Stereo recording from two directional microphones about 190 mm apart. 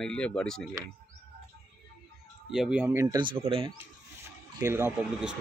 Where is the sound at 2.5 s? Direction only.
5° right (ahead or behind); by 3.7 s 30° right (ahead or behind).